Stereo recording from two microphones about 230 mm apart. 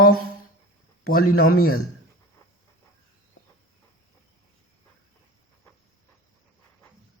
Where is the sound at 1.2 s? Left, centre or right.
Left.